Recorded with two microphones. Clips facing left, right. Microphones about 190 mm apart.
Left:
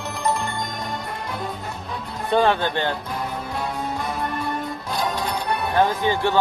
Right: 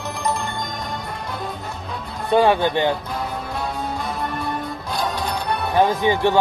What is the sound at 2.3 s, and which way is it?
Speech, 15° right (ahead or behind).